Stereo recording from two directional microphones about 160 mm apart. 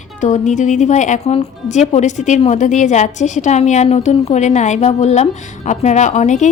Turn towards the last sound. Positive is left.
turn(degrees=50)  # may be behind; listen again after turning